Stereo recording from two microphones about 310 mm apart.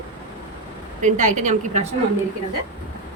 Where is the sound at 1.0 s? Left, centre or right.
Right.